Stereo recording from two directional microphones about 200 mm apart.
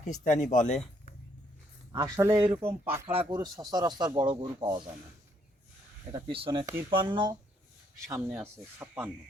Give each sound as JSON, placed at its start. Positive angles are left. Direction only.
{"t": 0.3, "sound": "speech", "side_deg": 35}
{"t": 1.9, "sound": "speech", "side_deg": -20}
{"t": 6.1, "sound": "speech", "side_deg": -30}